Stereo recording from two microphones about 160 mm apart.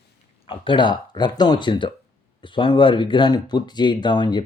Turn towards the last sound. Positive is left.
turn(degrees=30)  # may be behind; listen again after turning